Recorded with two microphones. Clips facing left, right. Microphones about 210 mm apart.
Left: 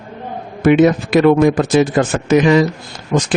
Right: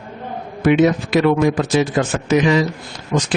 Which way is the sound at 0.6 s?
50° left (ahead or behind).